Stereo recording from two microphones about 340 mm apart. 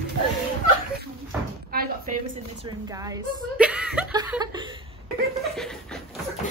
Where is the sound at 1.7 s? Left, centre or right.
Right.